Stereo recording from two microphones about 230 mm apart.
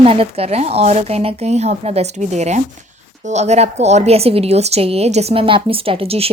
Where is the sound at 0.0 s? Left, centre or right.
Right.